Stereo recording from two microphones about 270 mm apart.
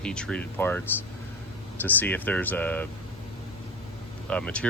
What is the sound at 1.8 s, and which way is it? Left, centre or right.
Speech, centre.